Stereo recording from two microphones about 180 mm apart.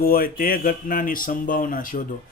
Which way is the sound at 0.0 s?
55° left (ahead or behind).